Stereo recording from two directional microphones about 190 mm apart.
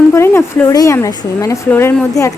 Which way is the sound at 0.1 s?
15° left (ahead or behind).